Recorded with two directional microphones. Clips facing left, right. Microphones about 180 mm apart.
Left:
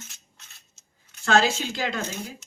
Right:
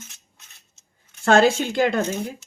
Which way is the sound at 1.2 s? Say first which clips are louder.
Right 6 dB; 50° right (ahead or behind).